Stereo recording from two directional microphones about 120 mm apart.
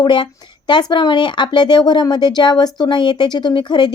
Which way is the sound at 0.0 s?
40° left (ahead or behind).